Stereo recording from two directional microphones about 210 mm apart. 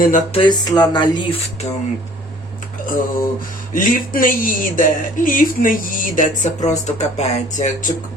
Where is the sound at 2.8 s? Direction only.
40° left (ahead or behind).